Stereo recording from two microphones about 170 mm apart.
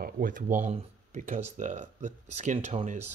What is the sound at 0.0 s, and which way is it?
Speech, 55° right (ahead or behind).